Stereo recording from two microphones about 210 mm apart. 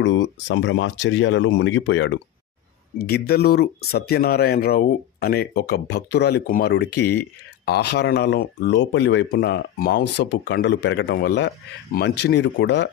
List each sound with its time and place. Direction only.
0.0 s speech: 60° left (ahead or behind)
3.0 s speech: 50° left (ahead or behind)